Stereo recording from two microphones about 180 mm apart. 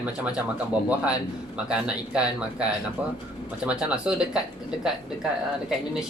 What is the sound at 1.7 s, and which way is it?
Speech, 5° right (ahead or behind).